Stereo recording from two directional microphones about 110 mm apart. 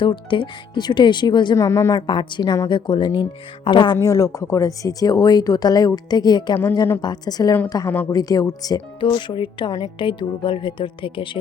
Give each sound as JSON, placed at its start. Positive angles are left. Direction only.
{"t": 0.0, "sound": "a woman's voice", "side_deg": 45}
{"t": 1.5, "sound": "speech", "side_deg": 25}
{"t": 2.0, "sound": "a woman's voice", "side_deg": 45}
{"t": 3.9, "sound": "speech", "side_deg": 30}
{"t": 9.0, "sound": "a woman's voice", "side_deg": 45}